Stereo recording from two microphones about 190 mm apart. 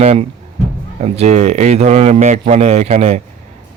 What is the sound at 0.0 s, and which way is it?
Speech, 35° right (ahead or behind).